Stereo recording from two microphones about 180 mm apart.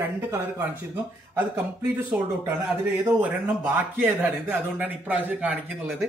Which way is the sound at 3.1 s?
10° right (ahead or behind).